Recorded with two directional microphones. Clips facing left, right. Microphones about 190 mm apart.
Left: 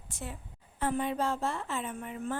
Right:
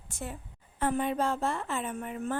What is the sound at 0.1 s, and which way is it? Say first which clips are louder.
A woman's voice: right 3 dB; 45° right (ahead or behind).